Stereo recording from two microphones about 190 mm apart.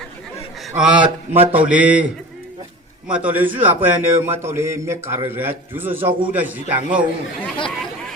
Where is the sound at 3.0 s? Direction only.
10° right (ahead or behind).